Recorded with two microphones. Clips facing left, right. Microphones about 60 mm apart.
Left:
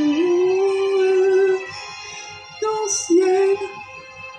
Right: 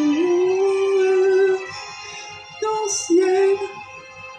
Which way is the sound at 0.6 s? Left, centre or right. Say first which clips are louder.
Even; centre.